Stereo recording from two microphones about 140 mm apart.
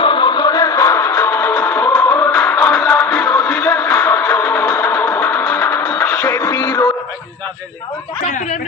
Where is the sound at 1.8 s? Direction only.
5° left (ahead or behind).